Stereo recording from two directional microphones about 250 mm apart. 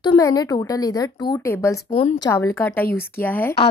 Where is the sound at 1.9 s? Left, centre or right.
Left.